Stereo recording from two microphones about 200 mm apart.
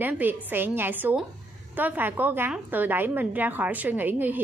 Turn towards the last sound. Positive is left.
turn(degrees=-10)  # may be behind; listen again after turning